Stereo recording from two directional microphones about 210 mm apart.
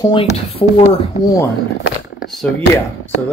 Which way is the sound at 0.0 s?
25° left (ahead or behind).